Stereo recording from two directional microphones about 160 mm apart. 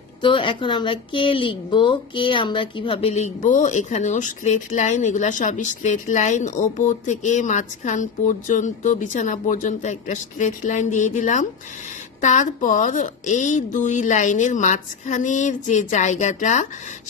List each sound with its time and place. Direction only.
0.2 s a woman's voice: 30° left (ahead or behind); by 16.6 s 50° left (ahead or behind)